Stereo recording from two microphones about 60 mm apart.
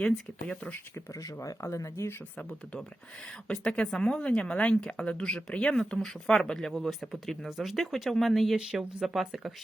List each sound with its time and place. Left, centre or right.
0.4 s speech: left
0.9 s speech: left
3.4 s a woman's voice: centre